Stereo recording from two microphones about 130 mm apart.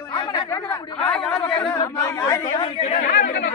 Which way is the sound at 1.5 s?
30° left (ahead or behind).